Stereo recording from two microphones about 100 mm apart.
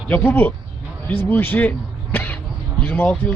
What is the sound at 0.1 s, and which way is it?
A man's voice, 20° left (ahead or behind).